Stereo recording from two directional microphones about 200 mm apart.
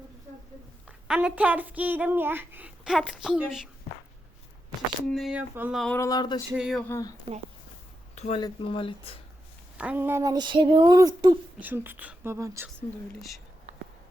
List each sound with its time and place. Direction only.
0.9 s a child's voice: 5° right (ahead or behind)
5.0 s a sound: centre (ahead or behind)
5.8 s speech: 10° left (ahead or behind)
6.5 s a sound: 5° right (ahead or behind)
6.8 s speech: 15° left (ahead or behind)
8.1 s a sound: 35° left (ahead or behind)
8.4 s speech: 25° left (ahead or behind)
9.7 s speech: 5° right (ahead or behind)
11.6 s a child's voice: 10° right (ahead or behind)